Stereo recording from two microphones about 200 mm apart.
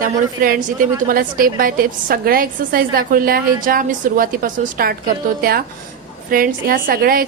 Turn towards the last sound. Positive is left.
turn(degrees=-45)  # may be behind; listen again after turning